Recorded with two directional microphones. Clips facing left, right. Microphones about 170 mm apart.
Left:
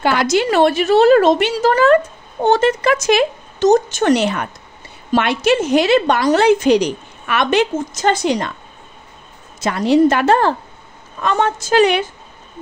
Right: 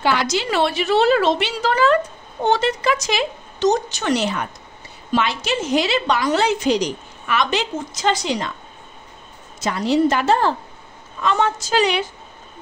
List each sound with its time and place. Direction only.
0.0 s a woman's voice: 50° left (ahead or behind)
9.6 s a woman's voice: 55° left (ahead or behind)